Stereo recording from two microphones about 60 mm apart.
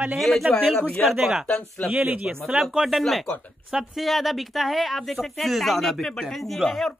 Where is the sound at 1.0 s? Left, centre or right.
Left.